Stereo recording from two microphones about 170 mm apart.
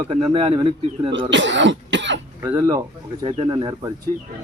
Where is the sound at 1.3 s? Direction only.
90° right.